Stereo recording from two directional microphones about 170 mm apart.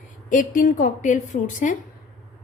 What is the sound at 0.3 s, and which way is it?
A woman's voice, 50° left (ahead or behind).